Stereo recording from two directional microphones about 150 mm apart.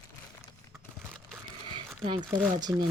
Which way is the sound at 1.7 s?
35° right (ahead or behind).